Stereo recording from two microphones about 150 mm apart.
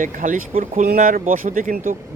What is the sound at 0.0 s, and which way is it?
Speech, 60° right (ahead or behind).